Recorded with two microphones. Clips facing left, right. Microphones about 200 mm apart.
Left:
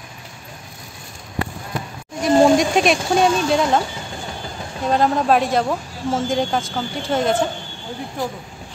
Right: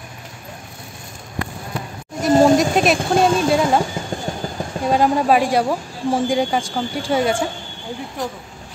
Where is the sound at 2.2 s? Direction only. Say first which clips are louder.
Right 1 dB; centre (ahead or behind).